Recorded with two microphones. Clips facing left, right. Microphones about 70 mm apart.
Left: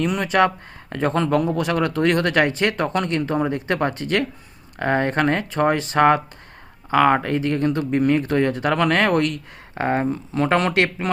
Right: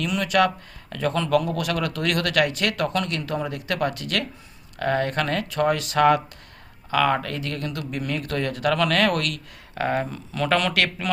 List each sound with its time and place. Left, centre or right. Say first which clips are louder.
0.0 s speech: left 3 dB; left